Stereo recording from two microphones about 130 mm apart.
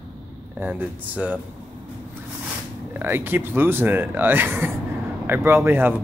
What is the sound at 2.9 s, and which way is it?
Speech, 15° right (ahead or behind).